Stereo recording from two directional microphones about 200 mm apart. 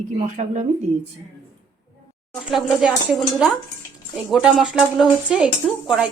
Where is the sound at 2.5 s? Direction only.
Centre (ahead or behind).